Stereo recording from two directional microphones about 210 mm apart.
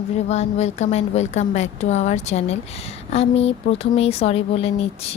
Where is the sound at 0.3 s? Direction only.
30° left (ahead or behind).